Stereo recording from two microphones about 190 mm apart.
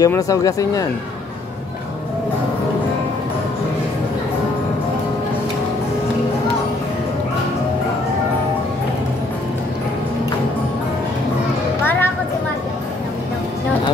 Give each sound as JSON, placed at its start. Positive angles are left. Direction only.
{"t": 0.0, "sound": "speech", "side_deg": 15}
{"t": 11.8, "sound": "music", "side_deg": 10}